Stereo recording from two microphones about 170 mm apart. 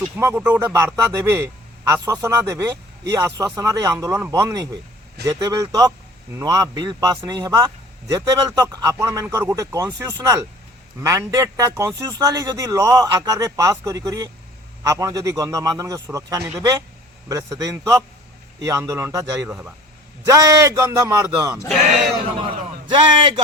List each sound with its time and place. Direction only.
0.2 s a man's voice: 15° right (ahead or behind)
22.9 s a man's voice: 25° right (ahead or behind)